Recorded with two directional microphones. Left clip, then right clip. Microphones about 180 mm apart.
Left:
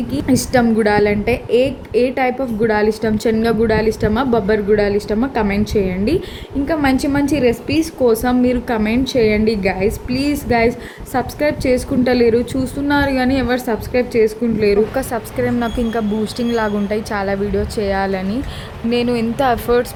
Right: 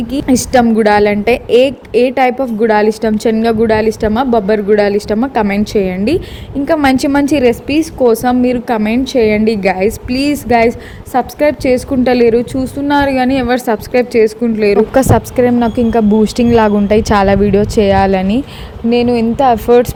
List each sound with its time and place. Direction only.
0.3 s a woman's voice: 35° right (ahead or behind)
15.5 s a woman's voice: 20° right (ahead or behind)
18.9 s speech: 20° right (ahead or behind)